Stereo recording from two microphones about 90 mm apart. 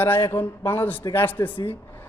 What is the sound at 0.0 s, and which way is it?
A man's voice, 25° left (ahead or behind).